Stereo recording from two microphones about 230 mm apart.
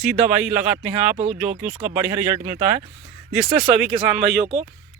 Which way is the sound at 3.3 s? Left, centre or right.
Centre.